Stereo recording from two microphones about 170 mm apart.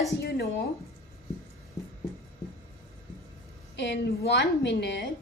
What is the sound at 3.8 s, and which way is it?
A woman's voice, 85° left.